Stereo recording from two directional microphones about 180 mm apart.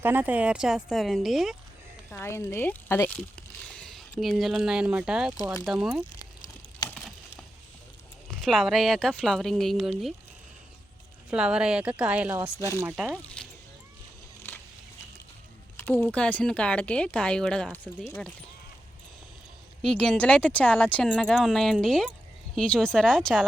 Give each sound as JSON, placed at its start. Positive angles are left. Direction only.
{"t": 0.0, "sound": "speech", "side_deg": -10}
{"t": 2.0, "sound": "speech", "side_deg": 15}
{"t": 6.9, "sound": "a sound", "side_deg": 0}
{"t": 8.3, "sound": "speech", "side_deg": 0}
{"t": 11.3, "sound": "speech", "side_deg": -5}
{"t": 12.5, "sound": "speech", "side_deg": 15}
{"t": 13.2, "sound": "a sound", "side_deg": 5}
{"t": 15.8, "sound": "speech", "side_deg": 10}
{"t": 19.8, "sound": "speech", "side_deg": 5}